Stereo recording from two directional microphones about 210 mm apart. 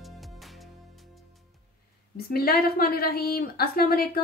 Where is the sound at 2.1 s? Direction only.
45° left (ahead or behind).